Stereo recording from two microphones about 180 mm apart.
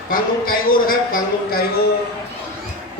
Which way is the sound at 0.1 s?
50° left (ahead or behind).